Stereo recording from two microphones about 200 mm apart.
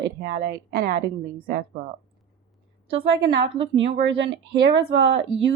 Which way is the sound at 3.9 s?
60° right (ahead or behind).